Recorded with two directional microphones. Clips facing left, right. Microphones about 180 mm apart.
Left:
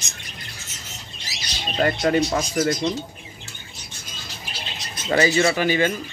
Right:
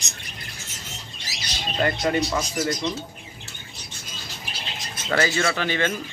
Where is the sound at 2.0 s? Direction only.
45° left (ahead or behind).